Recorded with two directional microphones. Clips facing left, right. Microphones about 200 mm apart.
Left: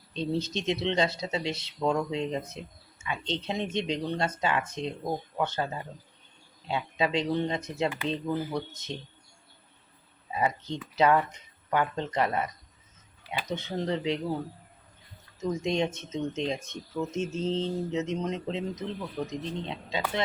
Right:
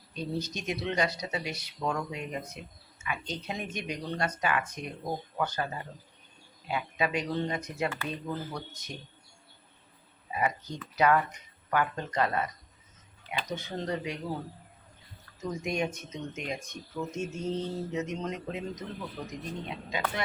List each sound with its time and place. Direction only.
0.1 s speech: 25° left (ahead or behind)
6.7 s speech: 25° left (ahead or behind)
10.3 s speech: 25° left (ahead or behind)
13.5 s speech: 20° left (ahead or behind)
15.4 s speech: 25° left (ahead or behind)